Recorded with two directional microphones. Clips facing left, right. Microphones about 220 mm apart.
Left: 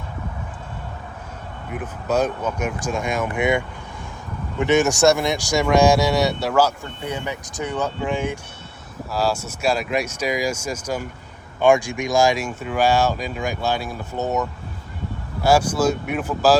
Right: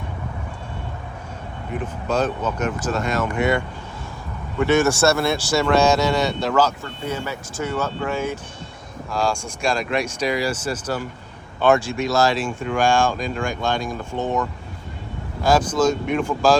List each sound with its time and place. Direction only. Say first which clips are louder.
1.7 s speech: left 1 dB; 5° left (ahead or behind)
4.6 s speech: left 1 dB; 15° left (ahead or behind)
9.0 s speech: even; 5° left (ahead or behind)